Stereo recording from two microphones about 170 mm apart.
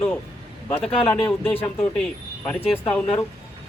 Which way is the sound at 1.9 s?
5° left (ahead or behind).